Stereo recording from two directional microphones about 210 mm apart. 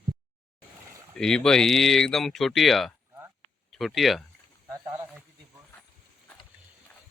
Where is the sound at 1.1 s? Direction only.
5° left (ahead or behind).